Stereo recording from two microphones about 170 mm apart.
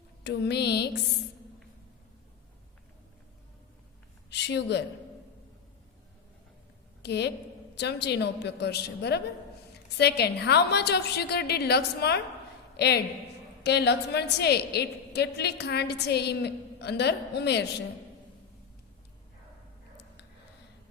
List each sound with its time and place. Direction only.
0.3 s a woman's voice: 75° left (ahead or behind)
4.3 s a sound: 85° left
7.0 s a woman's voice: 80° left